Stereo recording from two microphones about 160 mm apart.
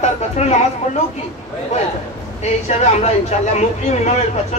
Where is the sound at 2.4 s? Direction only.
45° left (ahead or behind).